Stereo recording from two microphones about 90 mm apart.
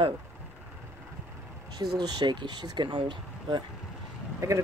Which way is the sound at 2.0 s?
50° right (ahead or behind).